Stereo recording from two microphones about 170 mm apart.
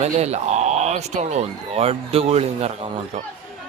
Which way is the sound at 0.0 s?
40° right (ahead or behind).